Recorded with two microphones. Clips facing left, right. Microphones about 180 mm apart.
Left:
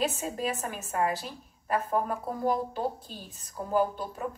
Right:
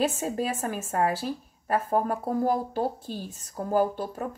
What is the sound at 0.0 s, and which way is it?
A woman's voice, 50° right (ahead or behind).